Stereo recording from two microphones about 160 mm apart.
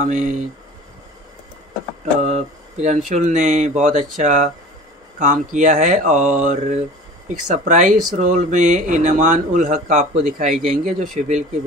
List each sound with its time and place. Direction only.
0.0 s speech: 50° right (ahead or behind)
2.2 s speech: 50° right (ahead or behind)
10.5 s speech: centre (ahead or behind)
10.8 s speech: 60° right (ahead or behind)
11.1 s speech: 45° right (ahead or behind)